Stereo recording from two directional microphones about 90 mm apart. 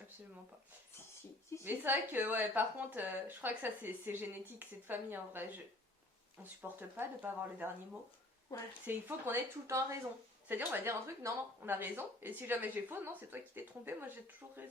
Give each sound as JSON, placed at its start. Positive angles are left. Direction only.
{"t": 1.6, "sound": "speech", "side_deg": -20}
{"t": 6.6, "sound": "speech", "side_deg": -20}
{"t": 8.5, "sound": "speech", "side_deg": 40}
{"t": 8.9, "sound": "speech", "side_deg": -25}
{"t": 10.5, "sound": "speech", "side_deg": -20}